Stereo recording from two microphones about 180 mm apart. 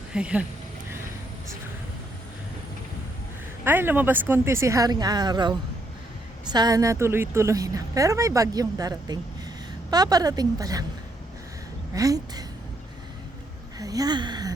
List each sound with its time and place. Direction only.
0.1 s speech: 5° right (ahead or behind)
3.6 s speech: 10° right (ahead or behind)
11.9 s speech: 20° right (ahead or behind)
13.7 s a sound: 20° right (ahead or behind)